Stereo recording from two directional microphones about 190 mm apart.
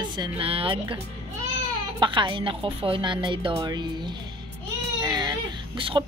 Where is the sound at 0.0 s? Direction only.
20° right (ahead or behind).